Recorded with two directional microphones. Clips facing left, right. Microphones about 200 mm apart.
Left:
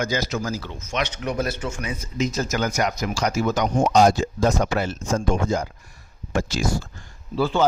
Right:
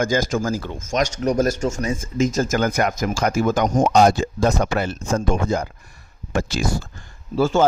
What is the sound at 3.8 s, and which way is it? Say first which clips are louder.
Speech: right 1 dB; 60° right (ahead or behind).